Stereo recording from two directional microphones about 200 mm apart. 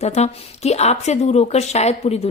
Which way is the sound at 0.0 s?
35° left (ahead or behind).